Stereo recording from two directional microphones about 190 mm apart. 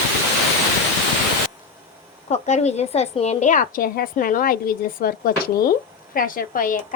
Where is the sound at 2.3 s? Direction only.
35° left (ahead or behind).